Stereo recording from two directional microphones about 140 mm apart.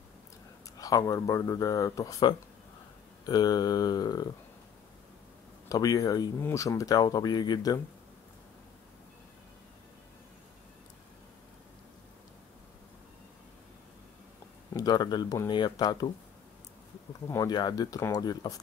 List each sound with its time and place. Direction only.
0.7 s speech: 25° left (ahead or behind)
5.7 s speech: 25° left (ahead or behind)
14.7 s speech: 30° left (ahead or behind)
17.3 s speech: 25° left (ahead or behind)